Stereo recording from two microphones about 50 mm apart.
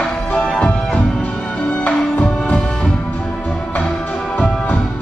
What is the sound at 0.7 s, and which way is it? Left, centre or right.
Music, left.